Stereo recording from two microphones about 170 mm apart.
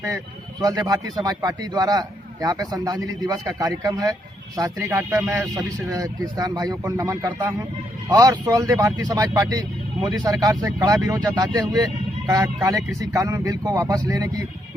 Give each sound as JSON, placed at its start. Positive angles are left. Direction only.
{"t": 0.6, "sound": "speech", "side_deg": -20}